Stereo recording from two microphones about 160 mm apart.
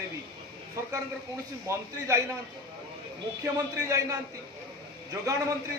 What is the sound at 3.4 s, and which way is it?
A man's voice, 20° right (ahead or behind).